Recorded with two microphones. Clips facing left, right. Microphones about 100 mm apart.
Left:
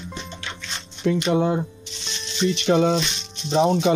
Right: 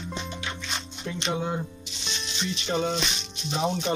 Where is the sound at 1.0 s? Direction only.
90° left.